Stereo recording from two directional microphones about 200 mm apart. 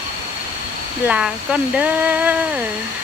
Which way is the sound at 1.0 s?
5° right (ahead or behind).